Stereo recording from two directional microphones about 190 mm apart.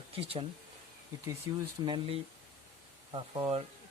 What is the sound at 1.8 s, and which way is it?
A woman's voice, 25° right (ahead or behind).